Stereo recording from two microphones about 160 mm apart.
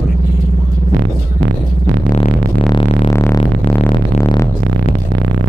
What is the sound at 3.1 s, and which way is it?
Music, 20° left (ahead or behind).